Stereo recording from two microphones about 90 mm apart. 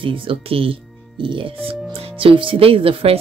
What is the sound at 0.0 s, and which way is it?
Speech, 85° right.